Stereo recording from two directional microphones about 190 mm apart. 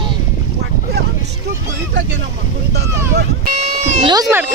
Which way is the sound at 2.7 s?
60° right (ahead or behind).